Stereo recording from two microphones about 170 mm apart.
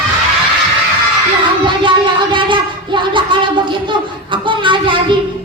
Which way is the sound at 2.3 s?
30° right (ahead or behind).